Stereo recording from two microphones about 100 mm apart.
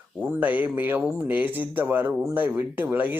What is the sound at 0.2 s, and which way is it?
Speech, 15° right (ahead or behind).